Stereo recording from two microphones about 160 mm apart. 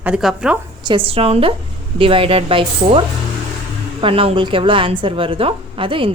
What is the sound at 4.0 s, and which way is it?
A woman's voice, 35° right (ahead or behind).